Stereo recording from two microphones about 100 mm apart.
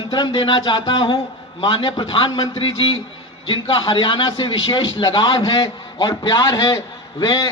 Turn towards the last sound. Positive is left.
turn(degrees=35)  # may be behind; listen again after turning